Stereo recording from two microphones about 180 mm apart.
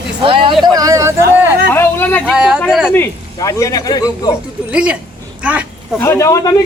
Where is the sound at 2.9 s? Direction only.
15° left (ahead or behind).